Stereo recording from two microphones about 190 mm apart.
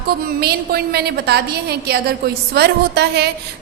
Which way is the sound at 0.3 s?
55° right (ahead or behind).